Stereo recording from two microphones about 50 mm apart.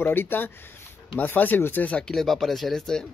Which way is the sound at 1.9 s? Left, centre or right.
Centre.